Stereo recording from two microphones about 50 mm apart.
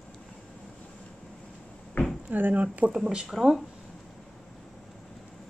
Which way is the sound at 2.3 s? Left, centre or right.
Right.